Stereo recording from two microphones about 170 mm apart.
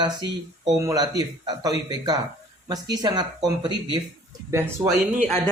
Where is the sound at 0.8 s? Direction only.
20° right (ahead or behind).